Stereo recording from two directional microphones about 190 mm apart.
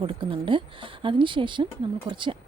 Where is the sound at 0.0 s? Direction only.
25° right (ahead or behind).